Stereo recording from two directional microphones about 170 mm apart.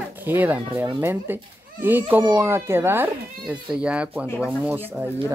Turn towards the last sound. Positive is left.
turn(degrees=-10)  # may be behind; listen again after turning